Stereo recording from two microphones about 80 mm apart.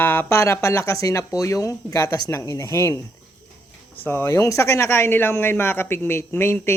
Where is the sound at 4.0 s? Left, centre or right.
Left.